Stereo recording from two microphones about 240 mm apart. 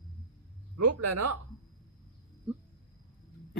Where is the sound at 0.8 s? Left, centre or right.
Right.